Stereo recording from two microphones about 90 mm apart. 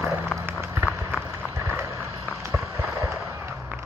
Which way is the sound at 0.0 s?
20° right (ahead or behind).